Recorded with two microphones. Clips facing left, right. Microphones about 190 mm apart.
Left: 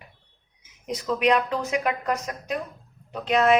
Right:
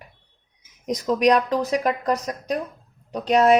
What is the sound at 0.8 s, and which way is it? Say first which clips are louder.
A woman's voice: right 4 dB; 40° right (ahead or behind).